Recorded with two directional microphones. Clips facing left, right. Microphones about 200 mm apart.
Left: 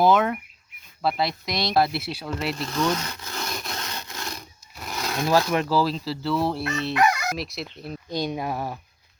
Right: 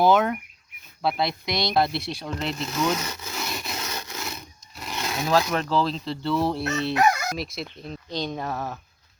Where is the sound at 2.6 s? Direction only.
5° right (ahead or behind).